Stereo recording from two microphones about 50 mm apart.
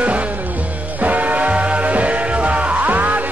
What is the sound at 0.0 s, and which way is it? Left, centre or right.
Music, right.